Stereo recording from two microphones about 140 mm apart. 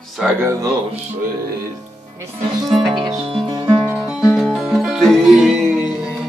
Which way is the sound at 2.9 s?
30° right (ahead or behind).